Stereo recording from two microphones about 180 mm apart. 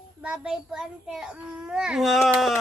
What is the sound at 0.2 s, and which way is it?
A child's voice, 5° right (ahead or behind).